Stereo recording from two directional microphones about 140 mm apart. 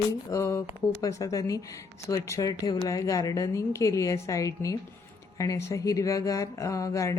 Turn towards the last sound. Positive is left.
turn(degrees=25)  # may be behind; listen again after turning